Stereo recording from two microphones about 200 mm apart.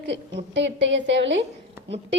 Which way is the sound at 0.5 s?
65° right (ahead or behind).